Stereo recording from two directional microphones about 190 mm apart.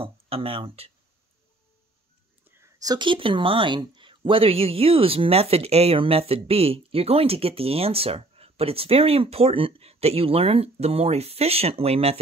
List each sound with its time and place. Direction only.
0.0 s speech: 30° right (ahead or behind)
2.4 s speech: 15° right (ahead or behind); by 12.2 s 35° right (ahead or behind)